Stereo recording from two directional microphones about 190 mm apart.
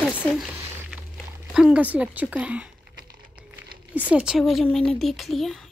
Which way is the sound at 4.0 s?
5° right (ahead or behind).